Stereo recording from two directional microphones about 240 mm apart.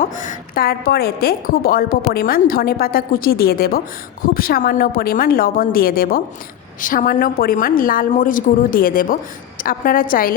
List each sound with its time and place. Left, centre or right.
0.0 s a woman's voice: left